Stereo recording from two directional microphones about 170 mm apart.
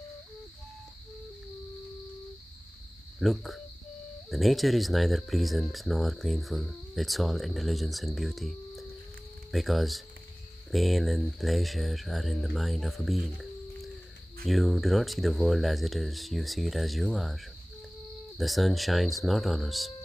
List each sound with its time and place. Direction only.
3.2 s speech: centre (ahead or behind)
18.4 s speech: centre (ahead or behind)